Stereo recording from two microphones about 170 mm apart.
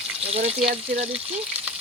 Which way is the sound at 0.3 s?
35° right (ahead or behind).